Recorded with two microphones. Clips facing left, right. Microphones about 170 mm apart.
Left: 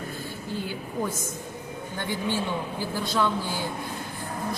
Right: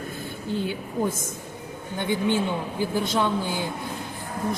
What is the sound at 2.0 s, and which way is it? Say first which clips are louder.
Speech: right 5 dB; 20° right (ahead or behind).